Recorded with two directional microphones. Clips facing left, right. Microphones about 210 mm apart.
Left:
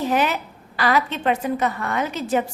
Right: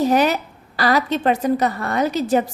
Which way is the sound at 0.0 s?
40° right (ahead or behind).